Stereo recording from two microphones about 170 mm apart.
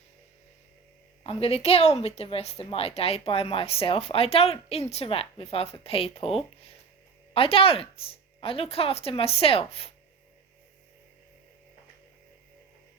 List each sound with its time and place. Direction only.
1.2 s a woman's voice: 35° left (ahead or behind)
7.3 s a woman's voice: 35° left (ahead or behind)